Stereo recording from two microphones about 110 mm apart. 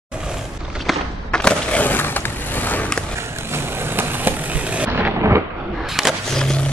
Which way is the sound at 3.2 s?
20° right (ahead or behind).